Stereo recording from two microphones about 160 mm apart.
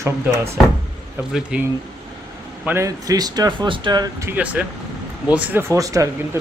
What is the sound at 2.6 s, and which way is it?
Speech, 20° right (ahead or behind).